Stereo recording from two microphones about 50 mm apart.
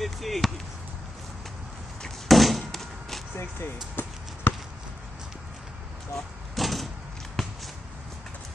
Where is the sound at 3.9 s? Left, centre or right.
Left.